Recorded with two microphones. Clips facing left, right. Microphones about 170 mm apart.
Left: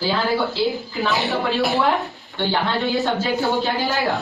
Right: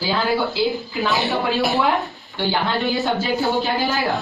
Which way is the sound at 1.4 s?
Centre (ahead or behind).